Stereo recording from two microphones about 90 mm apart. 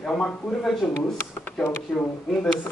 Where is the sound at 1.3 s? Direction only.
25° left (ahead or behind).